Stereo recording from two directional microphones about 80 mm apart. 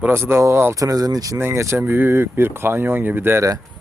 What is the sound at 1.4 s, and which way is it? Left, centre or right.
Speech, right.